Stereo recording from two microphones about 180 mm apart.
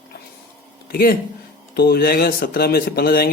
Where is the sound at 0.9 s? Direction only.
55° left (ahead or behind).